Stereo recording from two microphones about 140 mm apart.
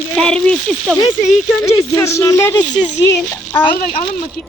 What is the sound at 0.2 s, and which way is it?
Speech, 5° left (ahead or behind).